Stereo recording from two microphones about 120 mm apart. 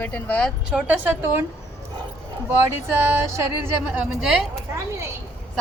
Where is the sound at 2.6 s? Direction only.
20° right (ahead or behind).